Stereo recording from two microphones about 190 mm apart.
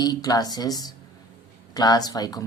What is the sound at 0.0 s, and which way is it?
Speech, 20° left (ahead or behind).